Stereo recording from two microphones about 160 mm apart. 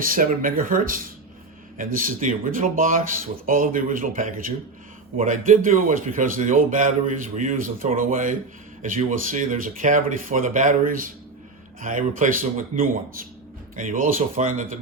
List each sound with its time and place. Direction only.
0.0 s speech: 60° right (ahead or behind)